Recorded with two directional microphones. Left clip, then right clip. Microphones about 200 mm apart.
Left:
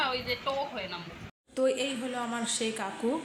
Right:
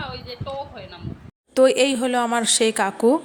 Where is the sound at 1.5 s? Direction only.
55° right (ahead or behind).